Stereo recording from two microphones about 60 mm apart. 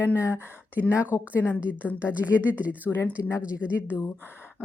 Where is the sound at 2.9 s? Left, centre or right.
Left.